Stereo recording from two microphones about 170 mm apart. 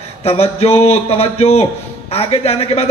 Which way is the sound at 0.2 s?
35° left (ahead or behind).